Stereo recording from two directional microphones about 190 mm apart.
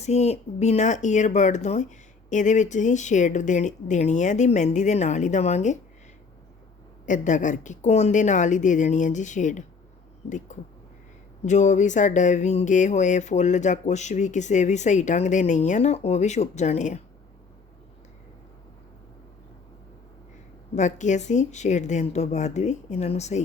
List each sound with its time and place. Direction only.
0.0 s speech: 35° left (ahead or behind)
7.0 s speech: 40° left (ahead or behind)
20.7 s speech: 40° left (ahead or behind)